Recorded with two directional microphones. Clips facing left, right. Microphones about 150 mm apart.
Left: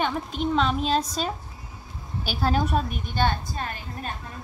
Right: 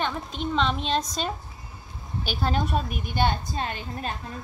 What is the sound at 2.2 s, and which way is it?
A woman's voice, 5° left (ahead or behind).